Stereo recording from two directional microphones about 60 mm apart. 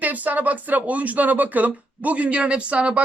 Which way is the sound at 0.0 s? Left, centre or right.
Right.